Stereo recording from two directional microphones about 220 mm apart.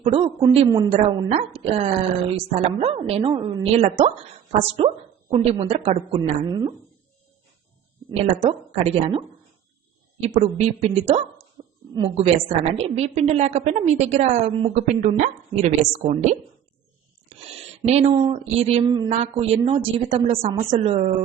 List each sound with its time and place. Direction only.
0.0 s a woman's voice: 25° right (ahead or behind)
5.3 s a woman's voice: 25° right (ahead or behind)
8.4 s a woman's voice: 25° right (ahead or behind)
11.6 s a sound: 25° right (ahead or behind)
11.9 s a woman's voice: 25° right (ahead or behind)
17.8 s a woman's voice: 30° right (ahead or behind)